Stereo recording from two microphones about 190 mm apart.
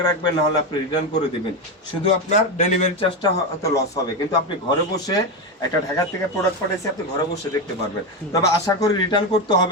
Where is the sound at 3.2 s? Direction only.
15° left (ahead or behind).